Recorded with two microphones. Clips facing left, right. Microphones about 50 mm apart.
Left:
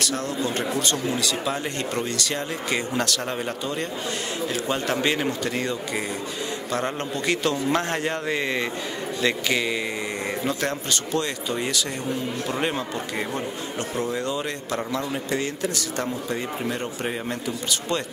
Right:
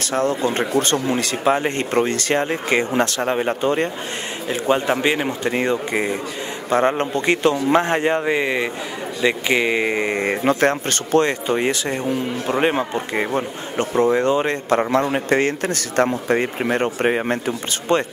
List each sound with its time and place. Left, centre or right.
0.0 s speech: right
4.5 s speech: right
9.5 s speech: right